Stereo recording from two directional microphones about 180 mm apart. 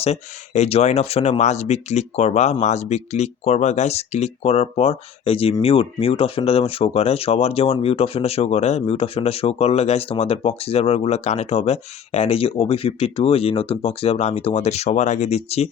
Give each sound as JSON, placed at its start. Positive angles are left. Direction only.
{"t": 0.0, "sound": "speech", "side_deg": 35}